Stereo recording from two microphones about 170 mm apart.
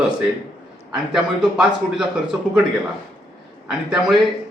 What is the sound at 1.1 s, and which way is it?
Speech, 5° right (ahead or behind).